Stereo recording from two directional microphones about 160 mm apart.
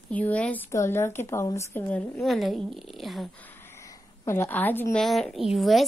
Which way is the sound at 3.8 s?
20° left (ahead or behind).